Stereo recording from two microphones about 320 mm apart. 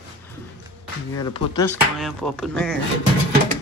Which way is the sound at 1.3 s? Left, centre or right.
Centre.